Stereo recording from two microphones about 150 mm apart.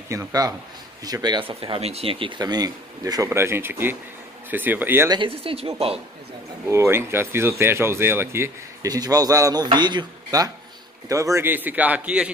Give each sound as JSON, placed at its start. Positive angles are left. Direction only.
{"t": 0.1, "sound": "speech", "side_deg": -20}
{"t": 1.5, "sound": "speech", "side_deg": -40}
{"t": 5.1, "sound": "speech", "side_deg": -35}
{"t": 6.7, "sound": "speech", "side_deg": -15}